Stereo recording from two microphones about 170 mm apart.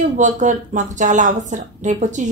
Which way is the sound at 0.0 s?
45° right (ahead or behind).